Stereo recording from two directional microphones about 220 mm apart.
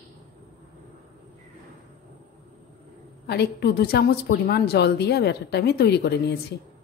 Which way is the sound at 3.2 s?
50° left (ahead or behind).